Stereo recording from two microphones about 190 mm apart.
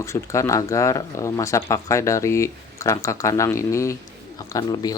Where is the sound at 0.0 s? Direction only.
15° left (ahead or behind).